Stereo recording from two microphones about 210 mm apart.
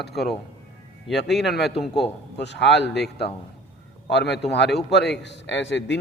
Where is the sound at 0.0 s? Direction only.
50° left (ahead or behind).